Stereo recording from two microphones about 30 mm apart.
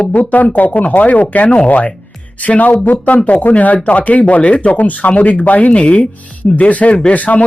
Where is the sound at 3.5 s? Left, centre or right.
Left.